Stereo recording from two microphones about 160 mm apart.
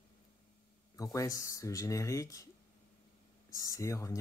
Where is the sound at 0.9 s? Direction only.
20° left (ahead or behind).